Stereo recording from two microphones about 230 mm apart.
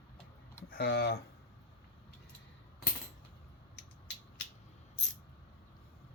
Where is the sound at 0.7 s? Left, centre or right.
Left.